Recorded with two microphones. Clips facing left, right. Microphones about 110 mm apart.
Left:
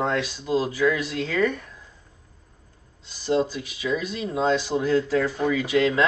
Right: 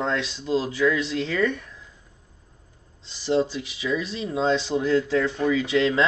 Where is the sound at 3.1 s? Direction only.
30° right (ahead or behind).